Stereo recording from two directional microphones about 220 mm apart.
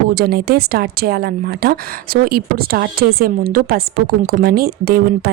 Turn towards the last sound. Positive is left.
turn(degrees=-45)  # may be behind; listen again after turning